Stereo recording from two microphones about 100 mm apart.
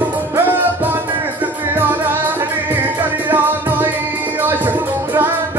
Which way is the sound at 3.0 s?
20° right (ahead or behind).